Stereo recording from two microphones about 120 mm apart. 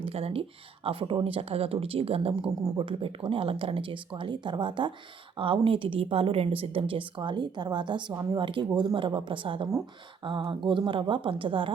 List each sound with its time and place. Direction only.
0.0 s a woman's voice: 55° right (ahead or behind)